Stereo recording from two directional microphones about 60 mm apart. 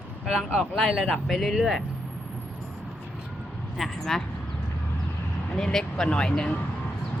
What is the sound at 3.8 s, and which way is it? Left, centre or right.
Speech, centre.